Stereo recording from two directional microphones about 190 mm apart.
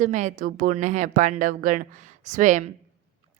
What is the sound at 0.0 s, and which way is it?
A woman's voice, 40° right (ahead or behind).